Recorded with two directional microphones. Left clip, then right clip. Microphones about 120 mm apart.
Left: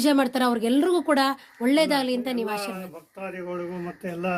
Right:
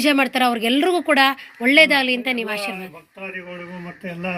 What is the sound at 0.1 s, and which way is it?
Speech, 35° left (ahead or behind).